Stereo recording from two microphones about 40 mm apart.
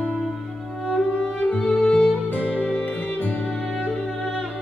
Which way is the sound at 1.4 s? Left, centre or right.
Left.